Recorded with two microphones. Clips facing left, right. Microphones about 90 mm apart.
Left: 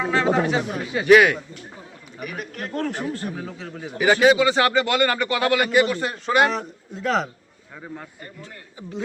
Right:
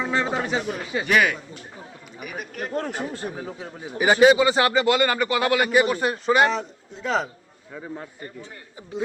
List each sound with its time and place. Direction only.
0.0 s speech: 5° left (ahead or behind)
2.1 s speech: 5° right (ahead or behind)
2.7 s a man's voice: 20° right (ahead or behind)
6.3 s speech: 5° left (ahead or behind)